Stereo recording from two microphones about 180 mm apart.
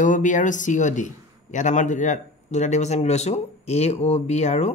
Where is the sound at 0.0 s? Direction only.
45° left (ahead or behind).